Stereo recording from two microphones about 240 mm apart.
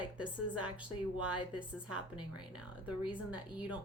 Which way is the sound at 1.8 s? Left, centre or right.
Centre.